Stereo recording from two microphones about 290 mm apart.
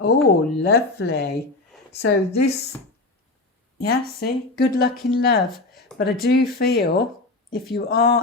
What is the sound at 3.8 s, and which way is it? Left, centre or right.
Speech, left.